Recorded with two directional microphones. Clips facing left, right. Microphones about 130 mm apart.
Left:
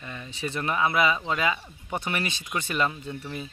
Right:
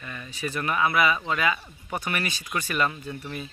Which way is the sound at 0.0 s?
25° left (ahead or behind).